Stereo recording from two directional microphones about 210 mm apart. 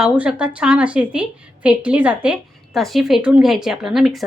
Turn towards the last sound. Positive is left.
turn(degrees=0)  # may be behind; listen again after turning